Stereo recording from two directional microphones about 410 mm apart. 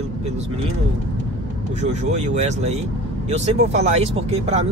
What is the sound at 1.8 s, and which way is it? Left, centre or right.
Speech, centre.